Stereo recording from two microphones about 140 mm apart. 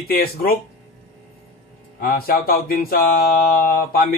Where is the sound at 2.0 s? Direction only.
90° left.